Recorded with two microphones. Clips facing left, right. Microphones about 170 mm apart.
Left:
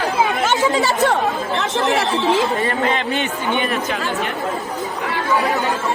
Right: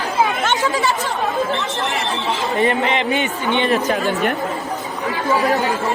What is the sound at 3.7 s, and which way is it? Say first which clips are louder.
Speech: right 4 dB; 40° right (ahead or behind).